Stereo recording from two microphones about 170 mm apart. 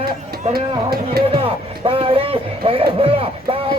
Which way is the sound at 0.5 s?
60° right (ahead or behind).